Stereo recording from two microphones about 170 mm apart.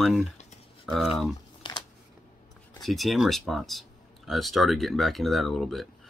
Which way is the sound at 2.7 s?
Centre (ahead or behind).